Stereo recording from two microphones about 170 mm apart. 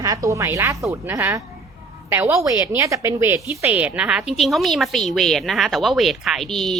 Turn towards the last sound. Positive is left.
turn(degrees=0)  # may be behind; listen again after turning